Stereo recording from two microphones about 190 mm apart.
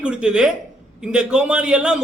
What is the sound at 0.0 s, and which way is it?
A man's voice, 5° right (ahead or behind).